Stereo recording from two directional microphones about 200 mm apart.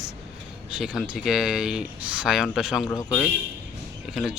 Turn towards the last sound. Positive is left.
turn(degrees=-5)  # may be behind; listen again after turning